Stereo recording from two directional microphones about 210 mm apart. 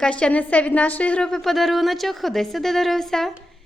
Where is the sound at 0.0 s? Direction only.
5° left (ahead or behind).